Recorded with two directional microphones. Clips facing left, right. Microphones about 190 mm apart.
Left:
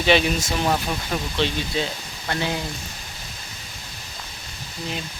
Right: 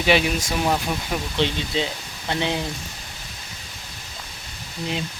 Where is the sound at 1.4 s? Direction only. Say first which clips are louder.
Right 1 dB; 20° right (ahead or behind).